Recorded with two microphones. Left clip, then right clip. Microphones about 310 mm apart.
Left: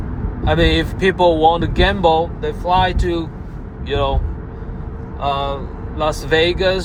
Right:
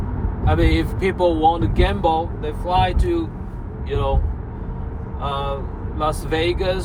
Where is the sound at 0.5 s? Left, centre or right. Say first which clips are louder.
Left 5 dB; left.